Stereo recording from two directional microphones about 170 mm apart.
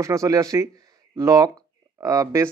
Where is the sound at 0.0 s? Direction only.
20° right (ahead or behind).